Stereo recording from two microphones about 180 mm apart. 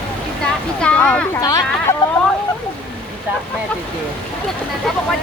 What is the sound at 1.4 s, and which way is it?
Speech, 20° left (ahead or behind).